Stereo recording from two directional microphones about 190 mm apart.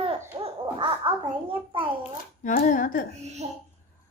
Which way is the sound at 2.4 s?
40° left (ahead or behind).